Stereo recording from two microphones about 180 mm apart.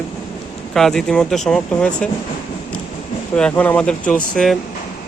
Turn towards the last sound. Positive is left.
turn(degrees=0)  # may be behind; listen again after turning